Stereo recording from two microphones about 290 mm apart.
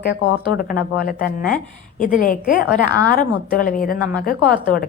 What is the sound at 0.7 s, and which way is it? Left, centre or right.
A woman's voice, left.